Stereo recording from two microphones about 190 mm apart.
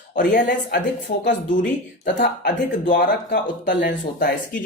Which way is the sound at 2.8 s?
50° left (ahead or behind).